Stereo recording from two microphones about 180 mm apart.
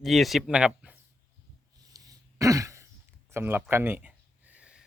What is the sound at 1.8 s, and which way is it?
Throat clearing, 20° right (ahead or behind).